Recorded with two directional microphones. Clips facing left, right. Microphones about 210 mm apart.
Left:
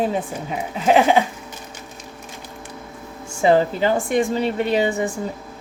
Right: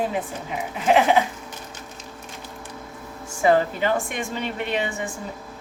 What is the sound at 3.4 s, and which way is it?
A woman's voice, 25° left (ahead or behind).